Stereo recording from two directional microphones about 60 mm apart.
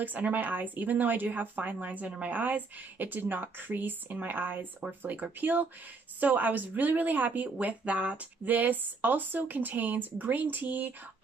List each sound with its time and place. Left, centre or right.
0.0 s speech: right